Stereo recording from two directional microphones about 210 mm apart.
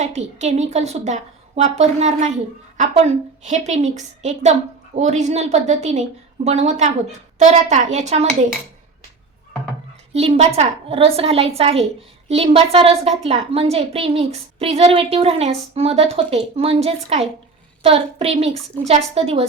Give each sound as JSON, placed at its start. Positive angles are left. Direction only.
{"t": 0.0, "sound": "a woman's voice", "side_deg": -35}
{"t": 10.1, "sound": "a woman's voice", "side_deg": -30}